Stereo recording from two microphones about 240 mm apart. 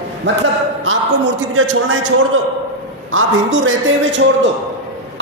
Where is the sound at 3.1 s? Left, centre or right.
Right.